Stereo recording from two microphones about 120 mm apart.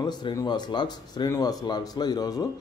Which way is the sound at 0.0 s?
35° left (ahead or behind).